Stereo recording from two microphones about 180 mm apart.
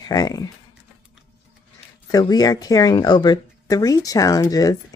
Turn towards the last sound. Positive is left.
turn(degrees=20)  # may be behind; listen again after turning